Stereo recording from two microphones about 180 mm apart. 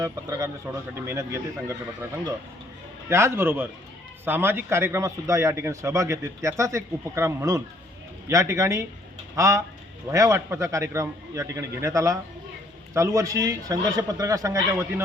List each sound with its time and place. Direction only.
0.0 s a man's voice: 20° right (ahead or behind)
3.1 s a man's voice: 15° right (ahead or behind)